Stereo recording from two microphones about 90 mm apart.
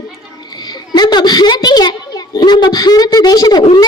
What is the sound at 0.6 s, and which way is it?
A child's voice, 50° left (ahead or behind).